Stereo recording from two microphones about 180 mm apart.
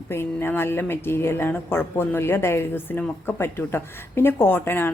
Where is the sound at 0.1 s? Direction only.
15° left (ahead or behind).